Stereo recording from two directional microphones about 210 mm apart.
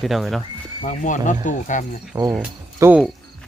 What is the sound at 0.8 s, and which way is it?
Speech, 35° left (ahead or behind).